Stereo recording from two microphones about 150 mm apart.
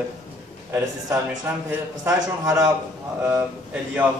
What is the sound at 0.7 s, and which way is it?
A man's voice, 15° right (ahead or behind).